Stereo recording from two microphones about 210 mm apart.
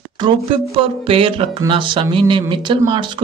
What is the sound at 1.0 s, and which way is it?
Speech, 25° right (ahead or behind).